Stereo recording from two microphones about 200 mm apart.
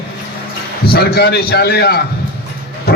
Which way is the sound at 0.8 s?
50° left (ahead or behind).